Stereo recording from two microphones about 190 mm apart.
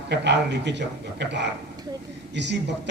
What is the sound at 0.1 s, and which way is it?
A man's voice, 65° right (ahead or behind).